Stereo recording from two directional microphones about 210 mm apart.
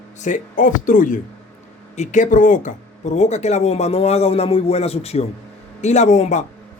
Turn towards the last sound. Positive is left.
turn(degrees=35)  # may be behind; listen again after turning